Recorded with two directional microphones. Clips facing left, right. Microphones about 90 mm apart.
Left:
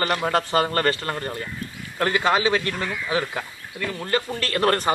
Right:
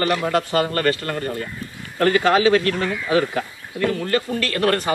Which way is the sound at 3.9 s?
25° left (ahead or behind).